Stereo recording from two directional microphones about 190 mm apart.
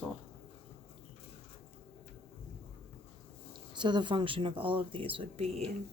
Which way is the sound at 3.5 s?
25° right (ahead or behind).